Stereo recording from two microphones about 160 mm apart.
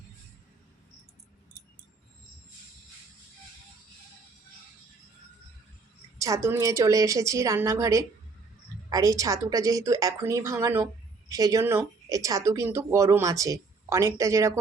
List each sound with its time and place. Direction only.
6.1 s speech: 20° right (ahead or behind)